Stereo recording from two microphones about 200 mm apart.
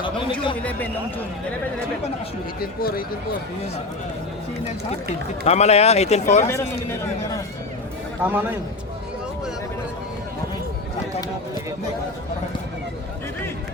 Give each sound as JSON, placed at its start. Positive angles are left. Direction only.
{"t": 0.0, "sound": "a sound", "side_deg": 25}
{"t": 0.6, "sound": "a man's voice", "side_deg": 10}
{"t": 2.6, "sound": "speech", "side_deg": 50}
{"t": 5.5, "sound": "speech", "side_deg": 30}
{"t": 6.5, "sound": "a man's voice", "side_deg": 15}
{"t": 8.2, "sound": "a man's voice", "side_deg": -10}